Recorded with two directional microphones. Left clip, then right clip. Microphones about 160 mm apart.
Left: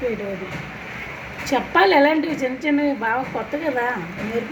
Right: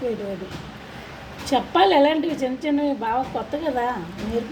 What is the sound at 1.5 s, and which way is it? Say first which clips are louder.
A woman's voice: left 1 dB; 15° right (ahead or behind).